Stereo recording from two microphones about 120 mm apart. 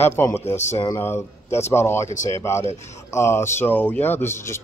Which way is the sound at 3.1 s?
20° left (ahead or behind).